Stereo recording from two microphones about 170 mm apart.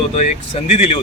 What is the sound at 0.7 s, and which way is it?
Speech, 45° left (ahead or behind).